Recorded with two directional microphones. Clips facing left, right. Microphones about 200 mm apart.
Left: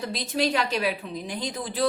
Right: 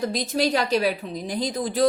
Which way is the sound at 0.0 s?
40° right (ahead or behind).